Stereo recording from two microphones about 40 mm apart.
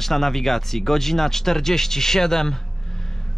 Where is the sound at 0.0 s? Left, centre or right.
Centre.